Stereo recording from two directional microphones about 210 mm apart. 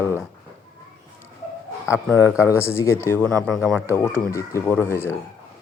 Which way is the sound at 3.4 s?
Centre (ahead or behind).